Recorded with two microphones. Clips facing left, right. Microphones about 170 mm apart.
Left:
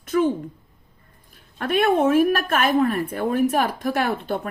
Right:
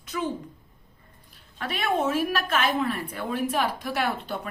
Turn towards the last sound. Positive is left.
turn(degrees=50)  # may be behind; listen again after turning